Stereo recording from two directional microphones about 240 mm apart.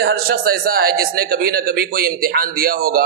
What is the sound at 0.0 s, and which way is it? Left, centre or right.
Speech, right.